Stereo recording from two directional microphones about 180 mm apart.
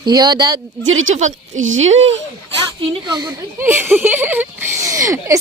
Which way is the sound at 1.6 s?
90° right.